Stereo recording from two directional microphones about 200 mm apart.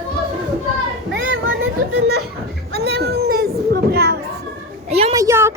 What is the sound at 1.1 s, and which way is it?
Children playing, 70° right (ahead or behind).